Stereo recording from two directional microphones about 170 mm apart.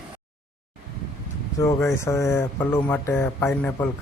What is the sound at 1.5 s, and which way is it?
Speech, 15° left (ahead or behind).